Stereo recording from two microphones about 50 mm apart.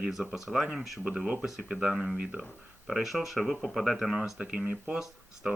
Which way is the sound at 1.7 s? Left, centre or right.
Centre.